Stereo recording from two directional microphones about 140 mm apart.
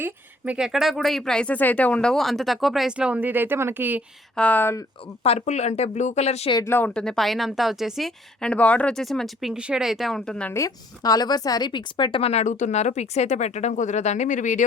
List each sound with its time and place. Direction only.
0.0 s speech: 10° right (ahead or behind)
4.4 s speech: 10° left (ahead or behind)
5.2 s a woman's voice: 50° left (ahead or behind)
6.7 s speech: 15° left (ahead or behind)
10.5 s a woman's voice: 25° left (ahead or behind); by 14.6 s 65° left (ahead or behind)